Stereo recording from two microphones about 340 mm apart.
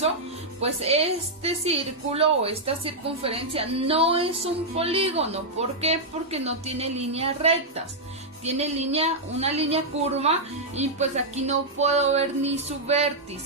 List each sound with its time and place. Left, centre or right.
0.6 s a woman's voice: centre
10.8 s music: centre